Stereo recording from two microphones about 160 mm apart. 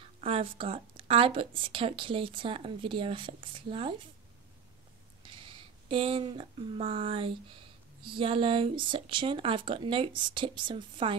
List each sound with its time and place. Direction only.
0.2 s a woman's voice: 35° right (ahead or behind)
5.2 s a woman's voice: 35° right (ahead or behind)